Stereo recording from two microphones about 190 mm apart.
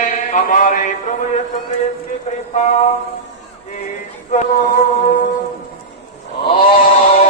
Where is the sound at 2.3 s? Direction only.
35° left (ahead or behind).